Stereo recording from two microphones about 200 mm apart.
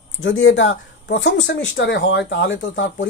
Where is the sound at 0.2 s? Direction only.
80° left.